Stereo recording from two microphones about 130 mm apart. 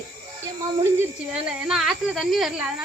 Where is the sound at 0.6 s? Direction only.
20° right (ahead or behind).